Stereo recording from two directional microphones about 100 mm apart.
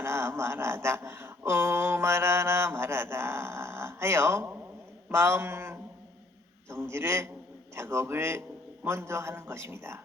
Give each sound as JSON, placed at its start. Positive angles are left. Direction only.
{"t": 0.0, "sound": "a man's voice", "side_deg": -25}